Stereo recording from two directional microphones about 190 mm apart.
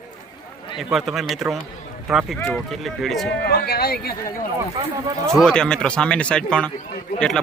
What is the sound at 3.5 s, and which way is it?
Speech, 55° left (ahead or behind).